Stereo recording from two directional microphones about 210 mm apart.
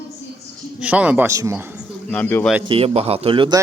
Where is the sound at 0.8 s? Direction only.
5° right (ahead or behind).